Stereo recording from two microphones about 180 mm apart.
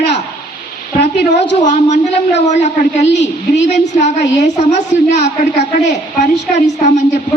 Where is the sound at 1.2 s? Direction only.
70° left (ahead or behind).